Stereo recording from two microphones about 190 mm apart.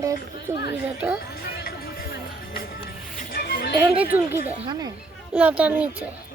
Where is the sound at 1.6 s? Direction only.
50° left (ahead or behind).